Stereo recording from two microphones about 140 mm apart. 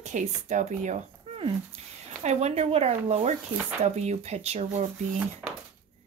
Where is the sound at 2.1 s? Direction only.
50° right (ahead or behind).